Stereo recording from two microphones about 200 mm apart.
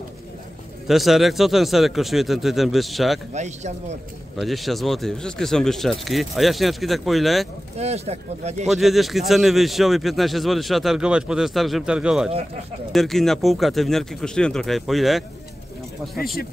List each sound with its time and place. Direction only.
0.8 s speech: centre (ahead or behind)
3.3 s speech: 35° right (ahead or behind)
4.4 s speech: centre (ahead or behind)
7.7 s speech: 30° right (ahead or behind)
8.6 s speech: centre (ahead or behind)